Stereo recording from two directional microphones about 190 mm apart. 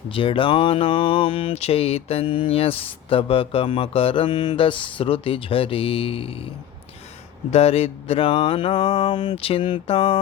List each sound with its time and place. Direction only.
0.1 s speech: 30° left (ahead or behind)
7.5 s speech: 35° left (ahead or behind)